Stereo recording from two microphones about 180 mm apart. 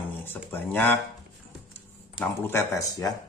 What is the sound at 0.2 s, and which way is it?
Speech, 10° left (ahead or behind).